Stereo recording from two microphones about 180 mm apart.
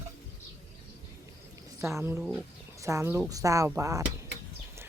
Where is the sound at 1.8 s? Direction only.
15° right (ahead or behind).